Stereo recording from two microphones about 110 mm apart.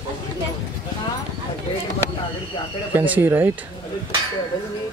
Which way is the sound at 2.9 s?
15° right (ahead or behind).